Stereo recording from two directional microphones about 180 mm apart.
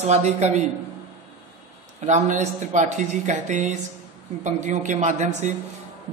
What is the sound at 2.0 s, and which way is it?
Speech, 40° right (ahead or behind).